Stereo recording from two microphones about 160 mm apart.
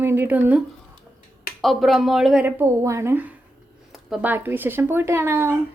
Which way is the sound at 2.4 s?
15° right (ahead or behind).